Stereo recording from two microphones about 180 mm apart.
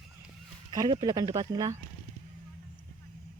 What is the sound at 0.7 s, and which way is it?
Speech, 25° right (ahead or behind).